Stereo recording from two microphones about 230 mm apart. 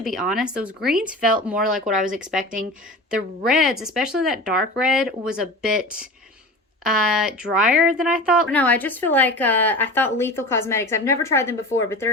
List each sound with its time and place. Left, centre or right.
0.0 s speech: centre
2.4 s speech: right
3.4 s speech: centre
7.1 s speech: centre
8.5 s speech: centre